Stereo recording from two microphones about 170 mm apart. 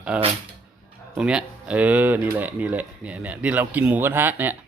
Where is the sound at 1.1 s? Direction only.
5° right (ahead or behind).